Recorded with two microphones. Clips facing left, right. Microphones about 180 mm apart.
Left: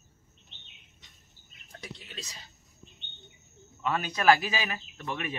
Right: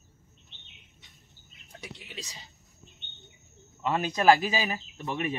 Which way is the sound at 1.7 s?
10° right (ahead or behind).